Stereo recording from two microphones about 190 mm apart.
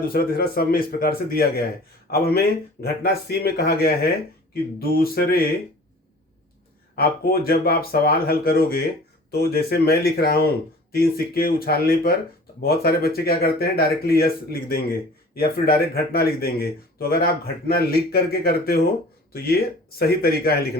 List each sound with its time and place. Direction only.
0.1 s speech: 50° left (ahead or behind)
6.9 s speech: 55° left (ahead or behind)
20.0 s speech: 55° left (ahead or behind)